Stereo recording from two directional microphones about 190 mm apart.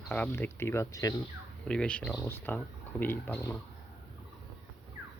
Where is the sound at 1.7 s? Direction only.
5° left (ahead or behind).